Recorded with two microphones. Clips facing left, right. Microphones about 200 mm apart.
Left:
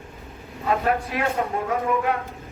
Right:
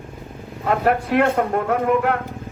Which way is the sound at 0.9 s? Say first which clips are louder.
Right 6 dB; 60° right (ahead or behind).